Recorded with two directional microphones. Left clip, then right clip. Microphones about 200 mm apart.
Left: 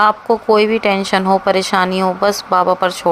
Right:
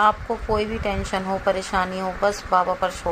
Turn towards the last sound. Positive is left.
turn(degrees=45)  # may be behind; listen again after turning